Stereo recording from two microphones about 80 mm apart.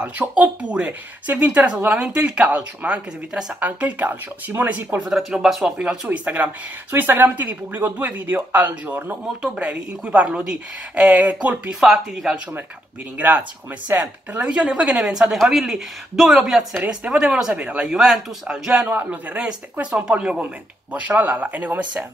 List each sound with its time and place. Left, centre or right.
0.3 s speech: centre
5.1 s speech: centre
6.0 s speech: centre
9.4 s speech: centre
11.8 s speech: centre
13.2 s speech: centre